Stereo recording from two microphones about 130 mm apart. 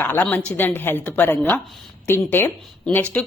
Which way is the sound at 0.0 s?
15° left (ahead or behind).